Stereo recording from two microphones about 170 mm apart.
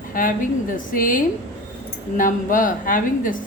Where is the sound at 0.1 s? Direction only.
55° left (ahead or behind).